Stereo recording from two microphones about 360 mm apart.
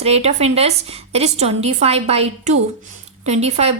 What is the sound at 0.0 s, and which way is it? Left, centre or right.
A woman's voice, centre.